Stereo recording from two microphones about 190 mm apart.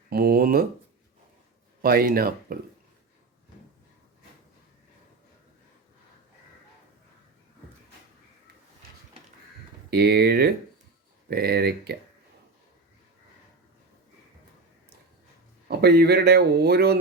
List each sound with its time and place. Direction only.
0.1 s a sound: 55° right (ahead or behind)
1.8 s speech: 50° right (ahead or behind)
9.9 s speech: 60° right (ahead or behind)
15.8 s speech: 60° right (ahead or behind)